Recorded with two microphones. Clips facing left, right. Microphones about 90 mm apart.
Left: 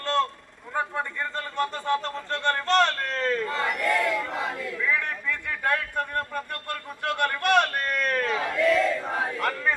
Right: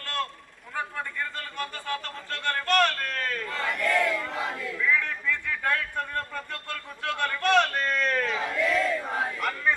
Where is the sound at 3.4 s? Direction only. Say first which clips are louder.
Left 2 dB; 15° left (ahead or behind).